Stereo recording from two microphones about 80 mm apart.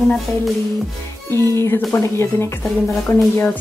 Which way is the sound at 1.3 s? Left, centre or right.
Left.